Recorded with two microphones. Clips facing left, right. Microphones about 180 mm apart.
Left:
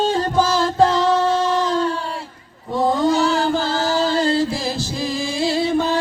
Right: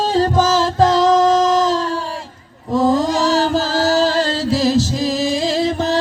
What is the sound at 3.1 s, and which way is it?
Chant, 90° right.